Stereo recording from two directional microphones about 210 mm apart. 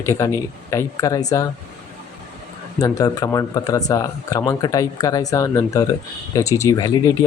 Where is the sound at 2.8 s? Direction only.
15° left (ahead or behind).